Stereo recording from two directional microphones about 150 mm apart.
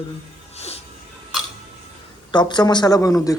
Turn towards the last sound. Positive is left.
turn(degrees=20)  # may be behind; listen again after turning